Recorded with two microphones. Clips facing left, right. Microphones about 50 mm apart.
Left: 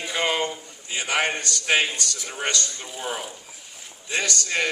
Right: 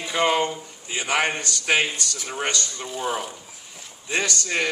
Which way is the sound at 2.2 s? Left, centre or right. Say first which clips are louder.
Right 2 dB; right.